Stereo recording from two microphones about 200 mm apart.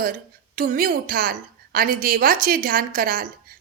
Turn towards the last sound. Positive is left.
turn(degrees=-45)  # may be behind; listen again after turning